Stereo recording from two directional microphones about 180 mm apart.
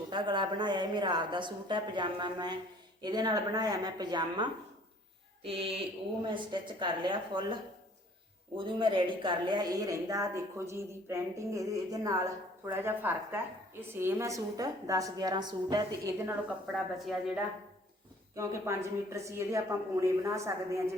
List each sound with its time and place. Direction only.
0.1 s a woman's voice: 25° right (ahead or behind)
5.4 s a sound: 30° right (ahead or behind)
6.2 s a woman's voice: 25° right (ahead or behind)
16.7 s speech: centre (ahead or behind)
18.3 s a woman's voice: 15° right (ahead or behind)